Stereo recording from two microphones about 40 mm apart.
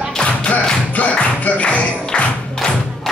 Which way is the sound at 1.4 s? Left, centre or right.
Left.